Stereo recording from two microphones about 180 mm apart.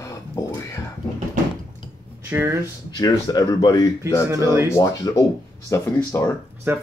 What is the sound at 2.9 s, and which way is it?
Speech, 20° left (ahead or behind).